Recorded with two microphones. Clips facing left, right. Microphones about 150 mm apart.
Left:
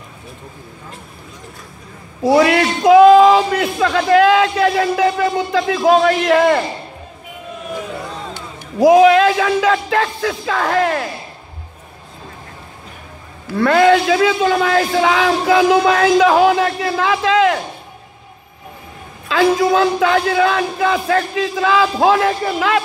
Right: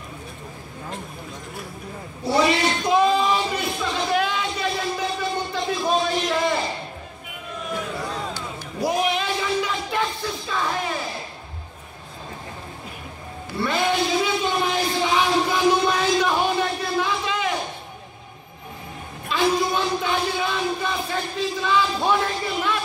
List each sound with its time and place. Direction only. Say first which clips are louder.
2.2 s speech: left 7 dB; 90° left; by 6.6 s 75° left (ahead or behind)
8.7 s speech: left 14 dB; 90° left
13.6 s a man's voice: left 11 dB; 90° left
19.2 s speech: left 7 dB; 90° left